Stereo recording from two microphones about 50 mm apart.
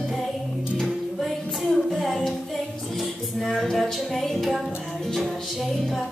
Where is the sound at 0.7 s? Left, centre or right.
Centre.